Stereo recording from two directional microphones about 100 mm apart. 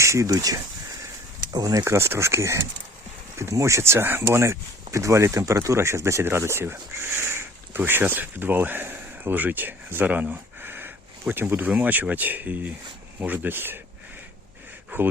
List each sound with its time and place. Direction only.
0.0 s speech: 30° right (ahead or behind)
14.9 s speech: 20° right (ahead or behind)